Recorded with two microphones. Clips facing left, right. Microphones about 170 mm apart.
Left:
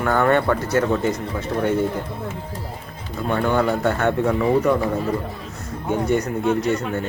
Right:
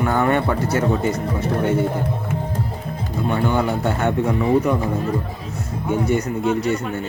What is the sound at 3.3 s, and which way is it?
Speech, 10° right (ahead or behind).